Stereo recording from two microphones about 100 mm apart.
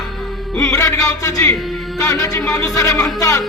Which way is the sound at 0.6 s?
35° left (ahead or behind).